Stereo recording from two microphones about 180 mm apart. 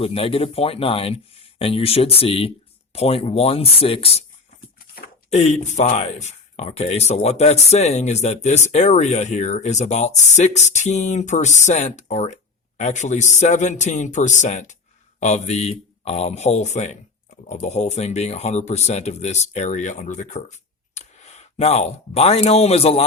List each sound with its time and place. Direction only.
0.0 s speech: 30° left (ahead or behind)
5.3 s speech: 40° left (ahead or behind)